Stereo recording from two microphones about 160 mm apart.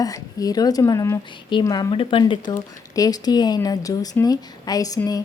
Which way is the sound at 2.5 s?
20° left (ahead or behind).